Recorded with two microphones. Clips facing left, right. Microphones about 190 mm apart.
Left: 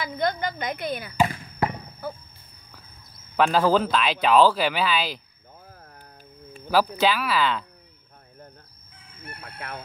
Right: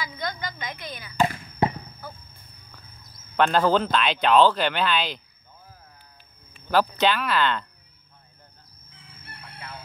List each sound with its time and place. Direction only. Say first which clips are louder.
0.0 s a woman's voice: left 6 dB; 55° left (ahead or behind)
1.6 s basketball bounce: right 2 dB; 20° right (ahead or behind)
3.3 s speech: even; 5° left (ahead or behind)
6.7 s speech: even; 5° left (ahead or behind)
8.9 s chicken: left 5 dB; 50° left (ahead or behind)